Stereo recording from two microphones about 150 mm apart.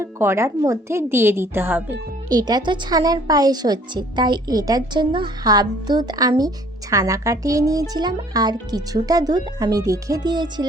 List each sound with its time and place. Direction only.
0.0 s a woman's voice: 15° right (ahead or behind)
2.3 s a woman's voice: 25° right (ahead or behind)